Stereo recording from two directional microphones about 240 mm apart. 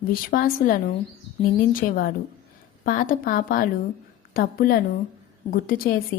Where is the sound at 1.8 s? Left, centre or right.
Left.